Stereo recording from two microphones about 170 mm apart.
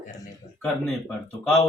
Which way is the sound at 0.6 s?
5° left (ahead or behind).